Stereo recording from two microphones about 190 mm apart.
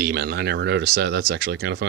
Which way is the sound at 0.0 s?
60° right (ahead or behind).